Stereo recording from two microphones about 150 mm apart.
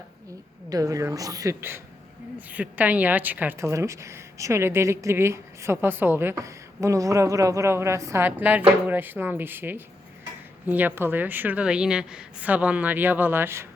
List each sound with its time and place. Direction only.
0.7 s a woman's voice: 25° right (ahead or behind)